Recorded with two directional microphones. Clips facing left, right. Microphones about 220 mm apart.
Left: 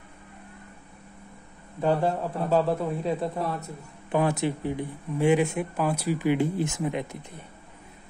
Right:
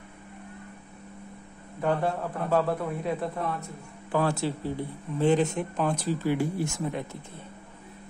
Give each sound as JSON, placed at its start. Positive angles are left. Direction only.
{"t": 1.8, "sound": "a man's voice", "side_deg": 25}
{"t": 3.3, "sound": "a man's voice", "side_deg": 35}
{"t": 4.1, "sound": "speech", "side_deg": 20}